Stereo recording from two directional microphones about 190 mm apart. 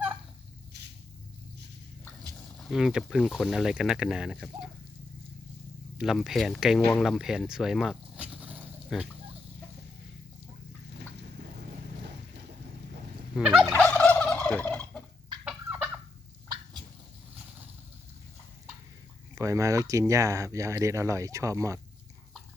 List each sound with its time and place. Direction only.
0.7 s a sound: 60° right (ahead or behind)
2.3 s speech: centre (ahead or behind)
6.0 s speech: centre (ahead or behind)
13.3 s fowl: 5° right (ahead or behind)
13.7 s fowl: 10° left (ahead or behind)
15.4 s fowl: 10° right (ahead or behind)
19.4 s speech: 15° right (ahead or behind)